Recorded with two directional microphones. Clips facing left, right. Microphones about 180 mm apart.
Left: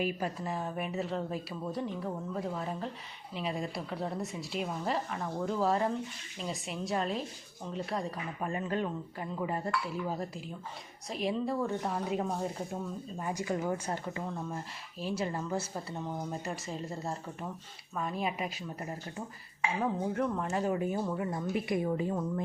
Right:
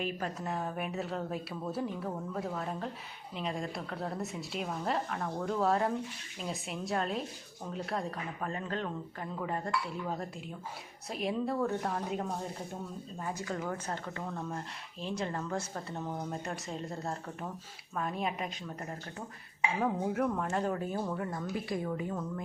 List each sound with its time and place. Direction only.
0.0 s speech: 5° left (ahead or behind)
8.4 s speech: 10° left (ahead or behind)
13.2 s speech: 15° left (ahead or behind)
19.8 s speech: 5° right (ahead or behind)
21.5 s a woman's voice: 25° left (ahead or behind)